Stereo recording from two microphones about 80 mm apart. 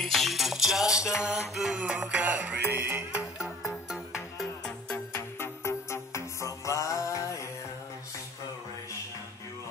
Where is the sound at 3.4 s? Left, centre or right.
Centre.